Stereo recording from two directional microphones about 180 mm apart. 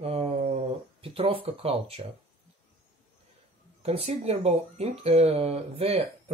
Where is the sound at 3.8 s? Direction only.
35° right (ahead or behind).